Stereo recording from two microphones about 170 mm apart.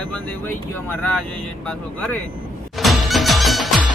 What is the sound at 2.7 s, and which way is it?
Music, centre (ahead or behind).